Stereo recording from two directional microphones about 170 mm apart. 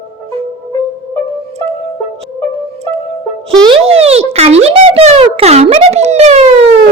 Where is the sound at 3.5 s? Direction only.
30° right (ahead or behind).